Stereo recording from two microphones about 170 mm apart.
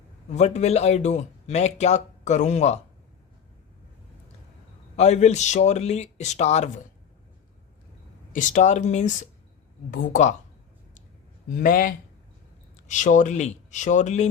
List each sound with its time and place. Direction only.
0.3 s speech: 40° left (ahead or behind)
4.9 s speech: 40° left (ahead or behind)
8.3 s speech: 45° left (ahead or behind)
11.4 s speech: 55° left (ahead or behind)